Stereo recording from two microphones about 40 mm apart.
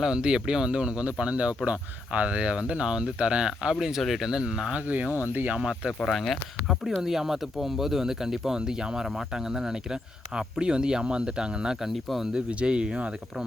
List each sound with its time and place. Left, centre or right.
0.0 s speech: centre
4.7 s speech: right
5.1 s speech: right
5.5 s speech: right
6.1 s speech: centre; by 11.8 s right
11.8 s speech: centre
12.3 s speech: right